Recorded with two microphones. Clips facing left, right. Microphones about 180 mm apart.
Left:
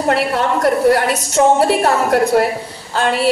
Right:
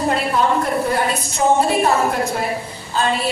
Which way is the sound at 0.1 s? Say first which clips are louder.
Left 4 dB; 75° left (ahead or behind).